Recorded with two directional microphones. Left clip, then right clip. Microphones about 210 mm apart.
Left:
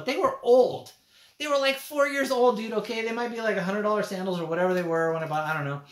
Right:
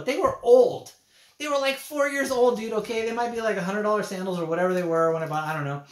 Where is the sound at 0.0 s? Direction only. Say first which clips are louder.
Right 2 dB; 5° left (ahead or behind).